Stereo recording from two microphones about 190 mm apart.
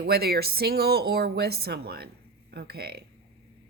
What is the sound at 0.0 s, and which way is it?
A woman's voice, 55° right (ahead or behind).